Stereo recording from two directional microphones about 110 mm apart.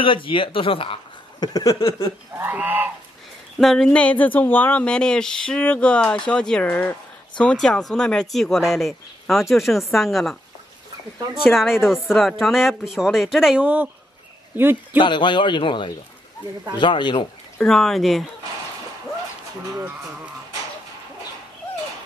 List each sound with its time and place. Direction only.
0.0 s speech: 55° left (ahead or behind)
1.4 s a sound: 35° left (ahead or behind)
2.3 s goose: 15° right (ahead or behind)
3.5 s speech: 5° left (ahead or behind)
11.5 s a man's voice: centre (ahead or behind); by 15.0 s 20° right (ahead or behind)
15.0 s speech: 45° left (ahead or behind)
17.6 s speech: 5° left (ahead or behind)